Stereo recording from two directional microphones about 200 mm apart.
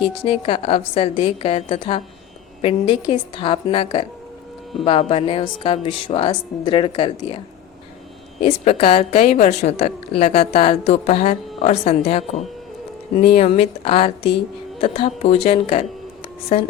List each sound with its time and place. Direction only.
0.0 s a woman's voice: 25° left (ahead or behind)